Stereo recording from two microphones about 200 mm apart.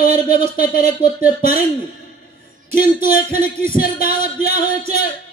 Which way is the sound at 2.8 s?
45° left (ahead or behind).